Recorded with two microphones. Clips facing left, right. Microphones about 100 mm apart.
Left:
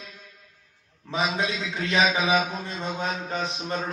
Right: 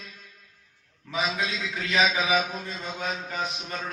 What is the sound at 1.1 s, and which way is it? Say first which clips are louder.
Mantra: left 2 dB; 30° left (ahead or behind).